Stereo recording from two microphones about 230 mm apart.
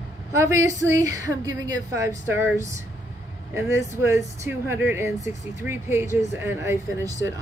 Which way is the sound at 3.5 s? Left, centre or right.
Centre.